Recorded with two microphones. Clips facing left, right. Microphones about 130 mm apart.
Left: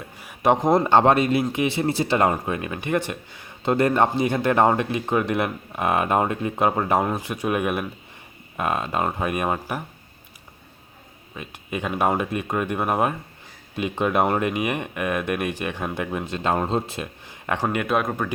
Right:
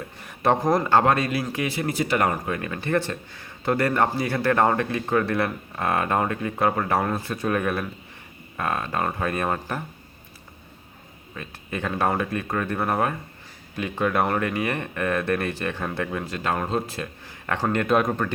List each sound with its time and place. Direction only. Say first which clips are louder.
0.2 s a man's voice: left 2 dB; 10° left (ahead or behind)
11.3 s speech: left 1 dB; 15° left (ahead or behind)